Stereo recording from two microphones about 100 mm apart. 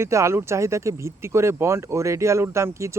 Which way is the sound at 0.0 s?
30° right (ahead or behind).